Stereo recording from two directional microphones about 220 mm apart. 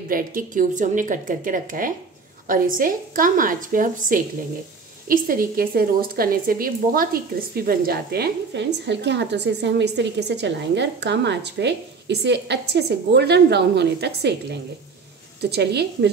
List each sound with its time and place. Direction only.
0.1 s a woman's voice: 40° right (ahead or behind)